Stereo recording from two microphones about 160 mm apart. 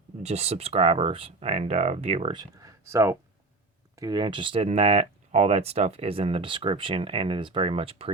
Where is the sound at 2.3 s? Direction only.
25° right (ahead or behind).